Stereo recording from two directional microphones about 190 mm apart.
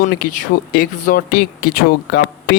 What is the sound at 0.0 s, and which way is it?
Speech, 50° left (ahead or behind).